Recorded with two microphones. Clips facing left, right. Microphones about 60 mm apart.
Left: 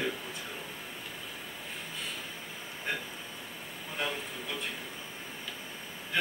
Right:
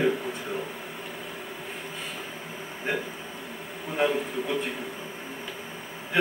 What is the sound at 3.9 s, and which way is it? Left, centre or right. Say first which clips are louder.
Speech: right 10 dB; centre.